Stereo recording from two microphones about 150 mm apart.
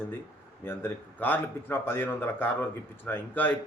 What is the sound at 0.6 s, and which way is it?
A man's voice, 15° left (ahead or behind).